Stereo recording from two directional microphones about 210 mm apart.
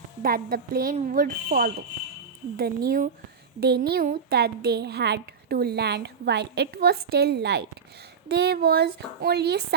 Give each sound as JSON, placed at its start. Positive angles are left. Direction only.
{"t": 0.2, "sound": "speech", "side_deg": -45}